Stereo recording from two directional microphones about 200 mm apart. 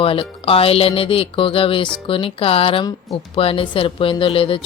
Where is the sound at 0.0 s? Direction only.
25° left (ahead or behind).